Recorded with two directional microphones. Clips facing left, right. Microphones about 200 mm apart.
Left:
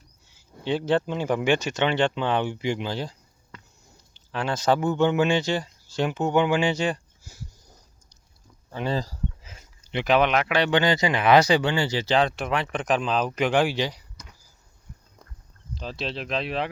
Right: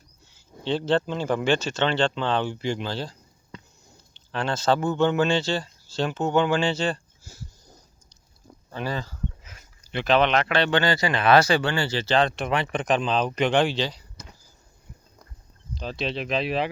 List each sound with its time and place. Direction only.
0.3 s speech: 10° left (ahead or behind)
8.7 s speech: 20° left (ahead or behind)
9.0 s speech: 35° left (ahead or behind); by 14.0 s 15° left (ahead or behind)
15.7 s speech: centre (ahead or behind)